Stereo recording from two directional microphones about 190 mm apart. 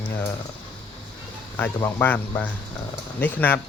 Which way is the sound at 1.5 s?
10° left (ahead or behind).